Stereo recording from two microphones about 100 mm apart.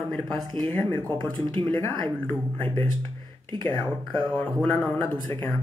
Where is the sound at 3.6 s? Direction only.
35° left (ahead or behind).